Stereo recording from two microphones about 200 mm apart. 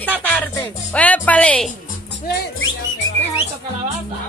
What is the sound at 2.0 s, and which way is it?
Music, 55° left (ahead or behind).